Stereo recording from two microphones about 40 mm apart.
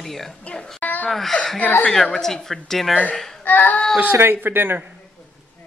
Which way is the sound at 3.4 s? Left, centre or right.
Left.